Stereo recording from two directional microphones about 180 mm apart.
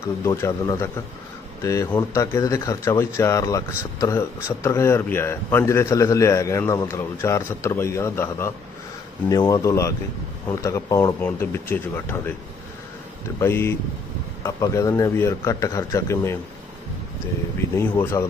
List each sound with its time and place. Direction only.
0.3 s speech: 15° left (ahead or behind)
13.4 s speech: 15° left (ahead or behind)
17.7 s speech: 15° left (ahead or behind)